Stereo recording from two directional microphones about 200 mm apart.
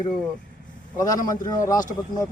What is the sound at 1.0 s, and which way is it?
Speech, 20° left (ahead or behind).